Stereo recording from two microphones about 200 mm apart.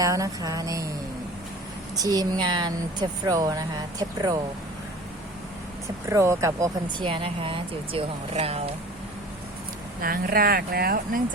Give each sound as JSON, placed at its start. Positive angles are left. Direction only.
{"t": 0.0, "sound": "speech", "side_deg": -15}
{"t": 2.0, "sound": "speech", "side_deg": -20}
{"t": 6.1, "sound": "speech", "side_deg": -15}
{"t": 7.1, "sound": "speech", "side_deg": -25}
{"t": 10.0, "sound": "speech", "side_deg": -45}